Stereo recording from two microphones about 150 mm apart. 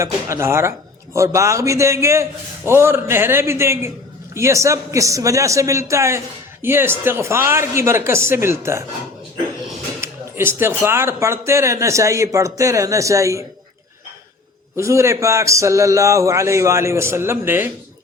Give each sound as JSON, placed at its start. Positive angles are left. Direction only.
{"t": 0.0, "sound": "a man's voice", "side_deg": -20}
{"t": 10.0, "sound": "speech", "side_deg": -15}
{"t": 14.8, "sound": "speech", "side_deg": -20}